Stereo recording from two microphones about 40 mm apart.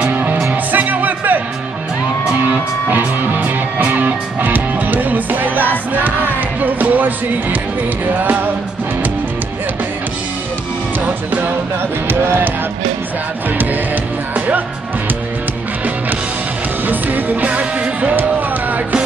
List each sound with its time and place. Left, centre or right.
0.0 s music: right
2.9 s music: right
11.1 s music: right
12.1 s speech: right
16.8 s music: right